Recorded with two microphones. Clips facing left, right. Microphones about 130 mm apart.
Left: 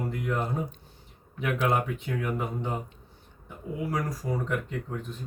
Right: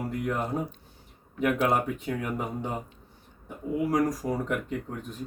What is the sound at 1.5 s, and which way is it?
Speech, 5° right (ahead or behind).